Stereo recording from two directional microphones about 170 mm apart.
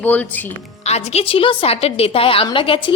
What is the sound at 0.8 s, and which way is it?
Speech, 40° left (ahead or behind).